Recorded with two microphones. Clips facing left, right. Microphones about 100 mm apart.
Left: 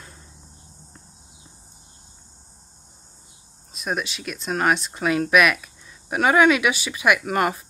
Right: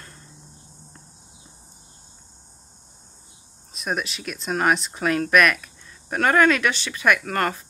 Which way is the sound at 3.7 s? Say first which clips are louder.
Even; centre (ahead or behind).